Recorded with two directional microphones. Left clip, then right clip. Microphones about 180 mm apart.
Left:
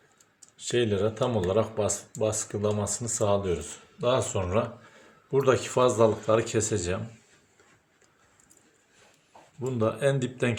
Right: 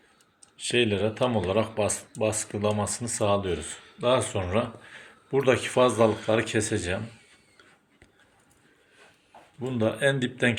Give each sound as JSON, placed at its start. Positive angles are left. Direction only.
{"t": 0.7, "sound": "speech", "side_deg": 20}
{"t": 9.6, "sound": "speech", "side_deg": 20}